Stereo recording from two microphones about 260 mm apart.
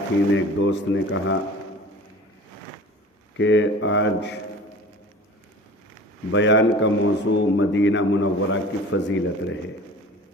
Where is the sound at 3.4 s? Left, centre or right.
Left.